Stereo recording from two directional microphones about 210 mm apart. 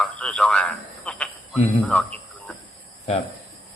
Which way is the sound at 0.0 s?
5° left (ahead or behind).